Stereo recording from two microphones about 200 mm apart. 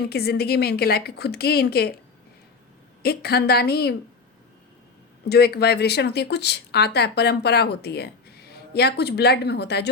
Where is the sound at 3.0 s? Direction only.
50° left (ahead or behind).